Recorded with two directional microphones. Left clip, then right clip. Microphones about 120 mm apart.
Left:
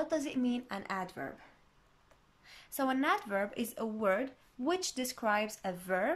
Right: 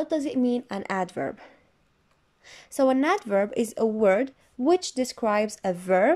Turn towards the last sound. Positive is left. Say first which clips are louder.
# right 12 dB
turn(degrees=-85)